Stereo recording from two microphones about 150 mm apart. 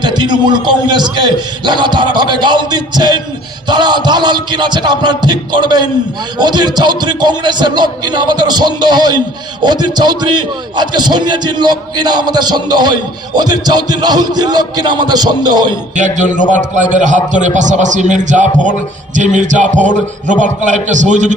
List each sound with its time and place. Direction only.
0.0 s a man's voice: 30° right (ahead or behind)
16.0 s a man's voice: 55° right (ahead or behind)